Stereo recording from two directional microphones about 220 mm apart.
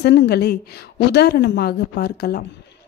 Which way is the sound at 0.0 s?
50° left (ahead or behind).